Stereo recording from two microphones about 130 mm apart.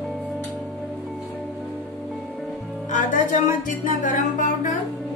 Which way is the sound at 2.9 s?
80° left.